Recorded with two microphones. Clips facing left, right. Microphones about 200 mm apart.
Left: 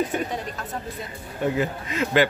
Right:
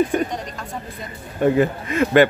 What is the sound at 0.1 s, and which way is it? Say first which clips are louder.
Speech: right 6 dB; 50° right (ahead or behind).